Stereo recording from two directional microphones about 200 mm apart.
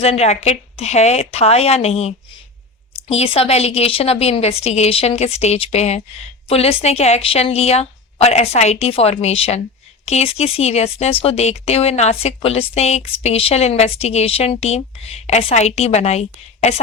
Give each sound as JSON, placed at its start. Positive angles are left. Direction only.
{"t": 0.0, "sound": "speech", "side_deg": 30}